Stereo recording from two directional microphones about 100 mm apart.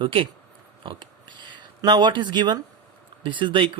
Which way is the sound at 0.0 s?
60° right (ahead or behind).